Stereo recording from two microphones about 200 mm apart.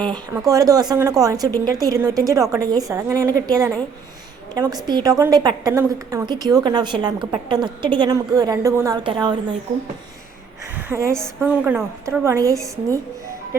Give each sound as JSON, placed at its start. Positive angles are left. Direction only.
{"t": 0.0, "sound": "a woman's voice", "side_deg": -20}
{"t": 10.8, "sound": "a woman's voice", "side_deg": -15}